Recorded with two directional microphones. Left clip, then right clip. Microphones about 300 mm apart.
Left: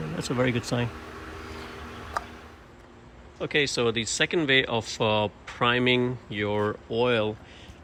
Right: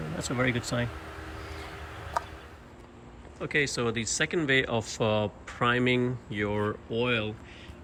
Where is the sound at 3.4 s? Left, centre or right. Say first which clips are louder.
Left 3 dB; centre.